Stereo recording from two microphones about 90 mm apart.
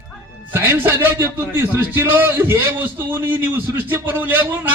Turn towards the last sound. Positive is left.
turn(degrees=-20)  # may be behind; listen again after turning